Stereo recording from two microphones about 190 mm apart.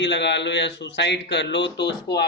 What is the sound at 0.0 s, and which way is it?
Speech, 65° left (ahead or behind).